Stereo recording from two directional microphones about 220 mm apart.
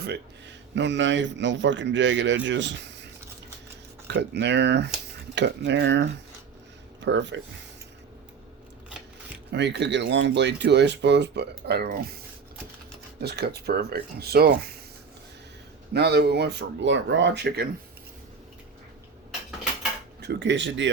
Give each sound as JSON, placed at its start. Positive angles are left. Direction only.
{"t": 0.0, "sound": "speech", "side_deg": -50}
{"t": 4.1, "sound": "speech", "side_deg": -50}
{"t": 9.5, "sound": "speech", "side_deg": -50}
{"t": 13.2, "sound": "speech", "side_deg": -45}
{"t": 15.9, "sound": "speech", "side_deg": -50}
{"t": 20.2, "sound": "speech", "side_deg": -55}